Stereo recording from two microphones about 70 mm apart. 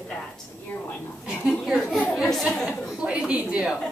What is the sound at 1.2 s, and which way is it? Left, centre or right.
Speech, centre.